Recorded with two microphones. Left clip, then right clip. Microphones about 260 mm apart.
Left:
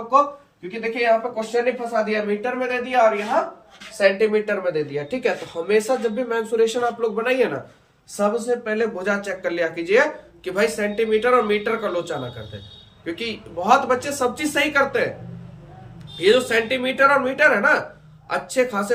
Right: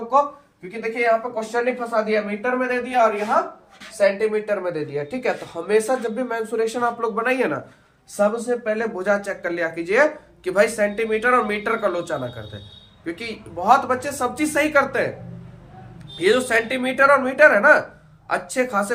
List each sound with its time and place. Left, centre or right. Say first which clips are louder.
0.7 s speech: left 1 dB; centre
3.9 s speech: left 1 dB; right
16.1 s speech: left 1 dB; centre